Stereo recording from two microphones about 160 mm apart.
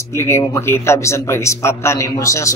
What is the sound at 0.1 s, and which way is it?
Speech, 15° left (ahead or behind).